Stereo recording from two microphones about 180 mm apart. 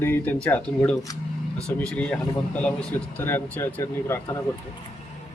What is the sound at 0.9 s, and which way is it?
Speech, 20° left (ahead or behind).